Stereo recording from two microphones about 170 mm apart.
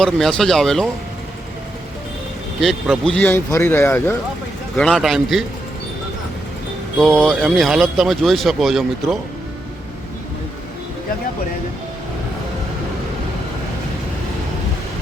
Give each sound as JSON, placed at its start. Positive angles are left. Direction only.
{"t": 0.0, "sound": "speech", "side_deg": 5}
{"t": 2.6, "sound": "speech", "side_deg": 0}
{"t": 4.8, "sound": "speech", "side_deg": 0}
{"t": 7.0, "sound": "speech", "side_deg": 5}